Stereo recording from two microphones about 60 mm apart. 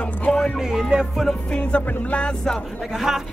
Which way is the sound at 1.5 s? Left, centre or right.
Centre.